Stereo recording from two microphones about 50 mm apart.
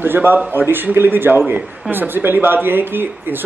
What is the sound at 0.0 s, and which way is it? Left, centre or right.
A man's voice, right.